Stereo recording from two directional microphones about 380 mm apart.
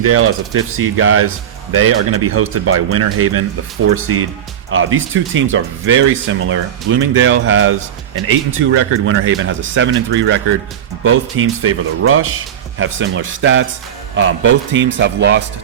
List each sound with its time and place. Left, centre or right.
0.0 s a man's voice: right